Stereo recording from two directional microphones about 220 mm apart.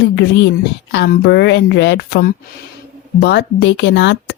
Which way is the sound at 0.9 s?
50° left (ahead or behind).